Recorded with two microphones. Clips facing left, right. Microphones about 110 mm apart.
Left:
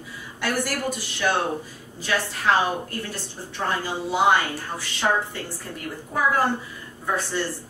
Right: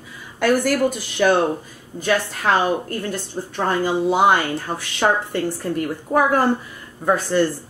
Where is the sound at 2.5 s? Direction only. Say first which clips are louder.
Right 3 dB; 50° right (ahead or behind).